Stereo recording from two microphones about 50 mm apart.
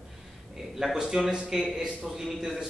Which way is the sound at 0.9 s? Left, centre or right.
Centre.